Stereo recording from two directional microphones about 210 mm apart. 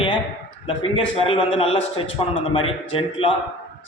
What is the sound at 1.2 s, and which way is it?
A man's voice, 25° left (ahead or behind).